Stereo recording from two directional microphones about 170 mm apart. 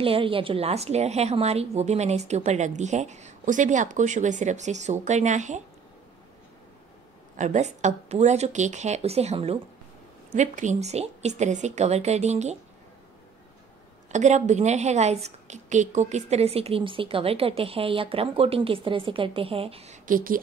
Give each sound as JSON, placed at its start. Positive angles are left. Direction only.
{"t": 0.0, "sound": "a woman's voice", "side_deg": -30}
{"t": 7.3, "sound": "a woman's voice", "side_deg": -45}
{"t": 14.1, "sound": "a woman's voice", "side_deg": -45}
{"t": 20.1, "sound": "speech", "side_deg": -55}